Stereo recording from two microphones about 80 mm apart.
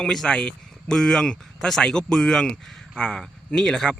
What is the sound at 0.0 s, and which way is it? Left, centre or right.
Speech, centre.